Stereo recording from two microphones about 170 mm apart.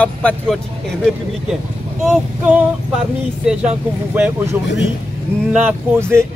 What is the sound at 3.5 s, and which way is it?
Speech, 5° right (ahead or behind).